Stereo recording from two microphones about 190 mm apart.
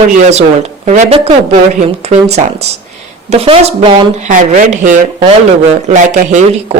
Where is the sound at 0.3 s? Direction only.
35° right (ahead or behind).